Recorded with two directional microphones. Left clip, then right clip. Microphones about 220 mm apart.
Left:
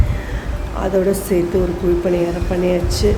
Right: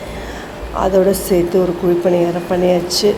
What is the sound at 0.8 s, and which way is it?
Speech, 5° right (ahead or behind).